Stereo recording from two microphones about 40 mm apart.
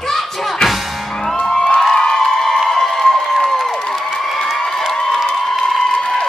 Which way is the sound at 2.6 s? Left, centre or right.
Centre.